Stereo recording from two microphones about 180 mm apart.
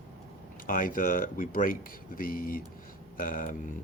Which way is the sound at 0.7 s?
50° left (ahead or behind).